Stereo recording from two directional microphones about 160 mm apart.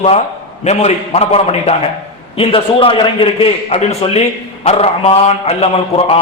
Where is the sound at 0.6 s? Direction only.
45° left (ahead or behind).